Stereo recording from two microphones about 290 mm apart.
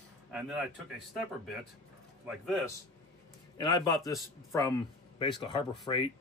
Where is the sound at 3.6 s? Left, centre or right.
Centre.